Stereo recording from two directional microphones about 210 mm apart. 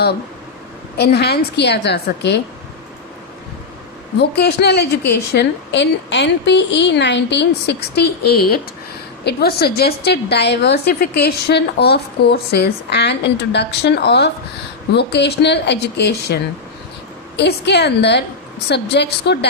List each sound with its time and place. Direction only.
0.9 s a woman's voice: 50° left (ahead or behind)
4.2 s a woman's voice: 50° left (ahead or behind)